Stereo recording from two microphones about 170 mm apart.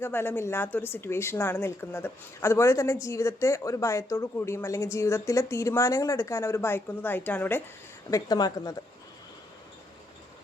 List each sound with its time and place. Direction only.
0.0 s speech: 15° left (ahead or behind)
8.1 s speech: 25° left (ahead or behind)